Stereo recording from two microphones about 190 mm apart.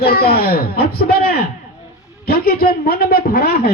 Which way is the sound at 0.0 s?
55° left (ahead or behind).